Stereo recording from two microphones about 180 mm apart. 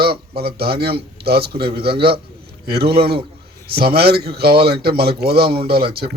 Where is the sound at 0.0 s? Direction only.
60° right (ahead or behind).